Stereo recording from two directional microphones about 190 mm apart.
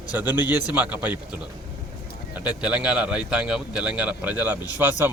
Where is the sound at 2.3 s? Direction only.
5° right (ahead or behind).